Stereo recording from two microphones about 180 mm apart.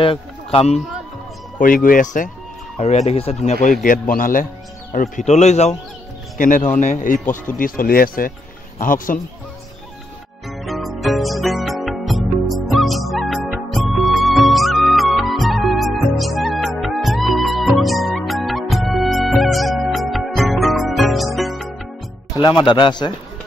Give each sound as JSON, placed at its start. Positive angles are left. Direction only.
{"t": 0.0, "sound": "a man's voice", "side_deg": 30}
{"t": 1.6, "sound": "speech", "side_deg": 50}
{"t": 3.1, "sound": "a man's voice", "side_deg": 35}
{"t": 3.8, "sound": "a man's voice", "side_deg": 50}
{"t": 10.5, "sound": "music", "side_deg": 0}
{"t": 22.4, "sound": "a man's voice", "side_deg": 25}